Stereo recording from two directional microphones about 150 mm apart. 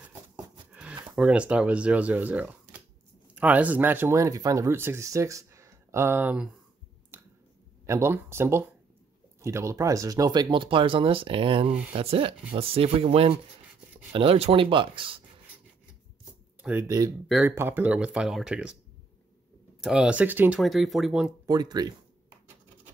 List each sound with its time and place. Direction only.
1.0 s speech: 5° right (ahead or behind)
7.1 s finger snapping: 15° right (ahead or behind)
7.8 s speech: 20° right (ahead or behind); by 15.2 s 35° right (ahead or behind)
16.8 s speech: 25° right (ahead or behind); by 18.8 s 5° right (ahead or behind)
19.8 s speech: 5° right (ahead or behind)
21.5 s speech: 25° right (ahead or behind)